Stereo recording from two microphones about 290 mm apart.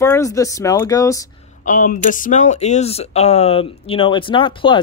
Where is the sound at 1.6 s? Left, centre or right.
Left.